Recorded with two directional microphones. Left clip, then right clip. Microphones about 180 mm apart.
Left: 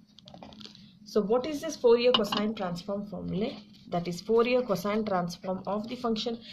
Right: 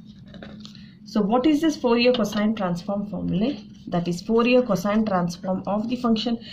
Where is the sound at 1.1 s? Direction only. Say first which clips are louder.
Right 6 dB; 35° left (ahead or behind).